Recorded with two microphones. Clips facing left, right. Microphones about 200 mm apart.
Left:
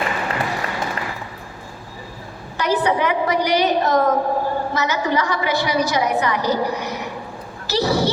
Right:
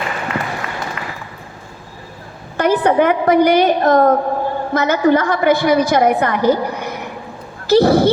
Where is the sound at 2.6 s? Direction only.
55° right (ahead or behind).